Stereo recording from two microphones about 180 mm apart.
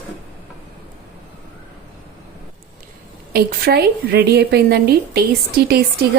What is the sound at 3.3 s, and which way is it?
A woman's voice, 60° right (ahead or behind).